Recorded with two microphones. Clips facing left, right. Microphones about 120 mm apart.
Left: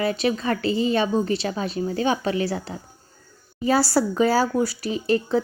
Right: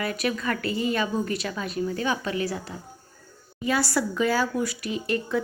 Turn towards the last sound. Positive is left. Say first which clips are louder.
# left 5 dB
turn(degrees=30)  # may be behind; listen again after turning